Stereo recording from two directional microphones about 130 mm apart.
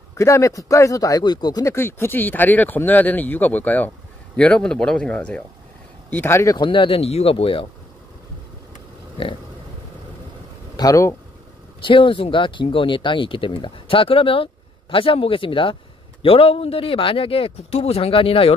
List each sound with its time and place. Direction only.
0.2 s speech: 25° left (ahead or behind); by 7.6 s 45° left (ahead or behind)
10.8 s speech: 25° left (ahead or behind)
11.8 s speech: 40° left (ahead or behind)